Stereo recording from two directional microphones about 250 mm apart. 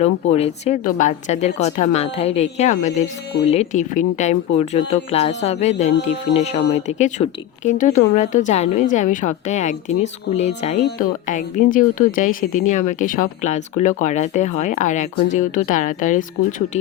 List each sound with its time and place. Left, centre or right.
0.0 s a woman's voice: left